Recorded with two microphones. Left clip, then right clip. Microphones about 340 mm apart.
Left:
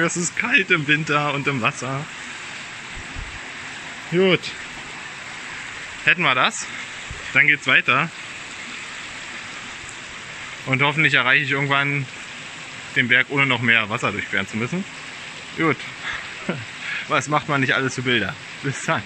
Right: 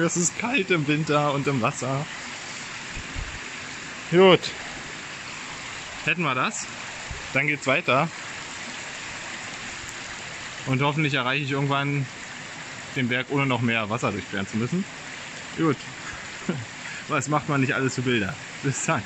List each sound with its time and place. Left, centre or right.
0.0 s speech: centre
4.1 s speech: right
6.0 s speech: centre
10.7 s speech: centre
12.9 s speech: centre
15.6 s speech: centre
17.1 s speech: centre